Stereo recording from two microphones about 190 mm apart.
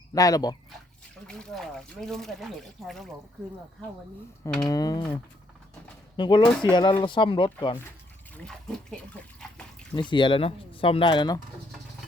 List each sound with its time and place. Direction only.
0.1 s speech: 20° left (ahead or behind)
1.3 s speech: 5° left (ahead or behind)
4.6 s speech: 20° left (ahead or behind)
6.1 s speech: 25° left (ahead or behind)
8.4 s speech: centre (ahead or behind)
9.9 s speech: 25° left (ahead or behind)